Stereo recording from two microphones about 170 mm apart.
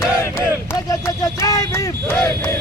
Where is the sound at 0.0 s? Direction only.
15° left (ahead or behind).